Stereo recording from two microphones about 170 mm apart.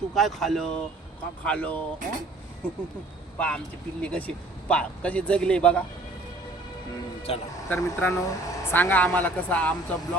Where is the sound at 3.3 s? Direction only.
5° left (ahead or behind).